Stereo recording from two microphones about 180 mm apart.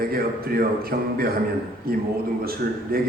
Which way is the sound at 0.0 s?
55° right (ahead or behind).